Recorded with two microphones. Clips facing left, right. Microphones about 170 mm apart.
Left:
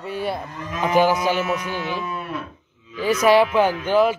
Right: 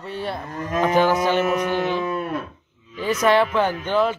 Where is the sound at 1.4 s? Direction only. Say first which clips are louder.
Right 4 dB; 55° right (ahead or behind).